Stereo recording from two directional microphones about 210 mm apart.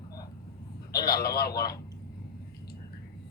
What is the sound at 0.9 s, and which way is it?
Speech, 45° left (ahead or behind).